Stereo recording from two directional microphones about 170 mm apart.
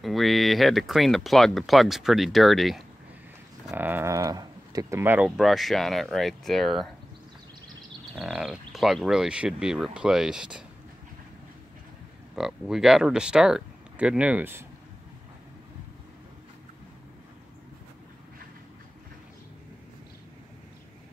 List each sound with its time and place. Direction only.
0.0 s speech: centre (ahead or behind)
3.6 s speech: 10° right (ahead or behind)
5.4 s speech: centre (ahead or behind)
8.2 s speech: 5° right (ahead or behind)
12.4 s speech: centre (ahead or behind)